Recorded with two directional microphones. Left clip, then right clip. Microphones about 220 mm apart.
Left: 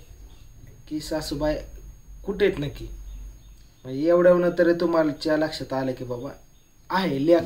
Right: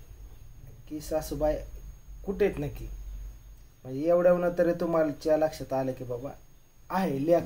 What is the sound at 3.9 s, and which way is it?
Speech, 5° right (ahead or behind).